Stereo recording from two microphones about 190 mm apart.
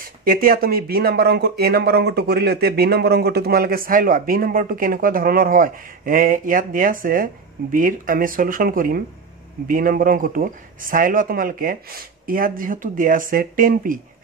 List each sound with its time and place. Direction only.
0.0 s speech: 50° right (ahead or behind)